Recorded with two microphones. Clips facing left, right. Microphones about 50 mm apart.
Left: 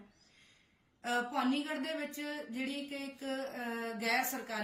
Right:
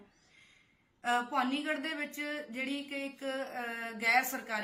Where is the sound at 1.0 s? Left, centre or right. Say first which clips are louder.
Right 2 dB; right.